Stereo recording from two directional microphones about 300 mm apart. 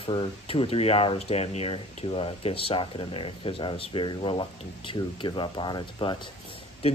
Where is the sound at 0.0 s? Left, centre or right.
Centre.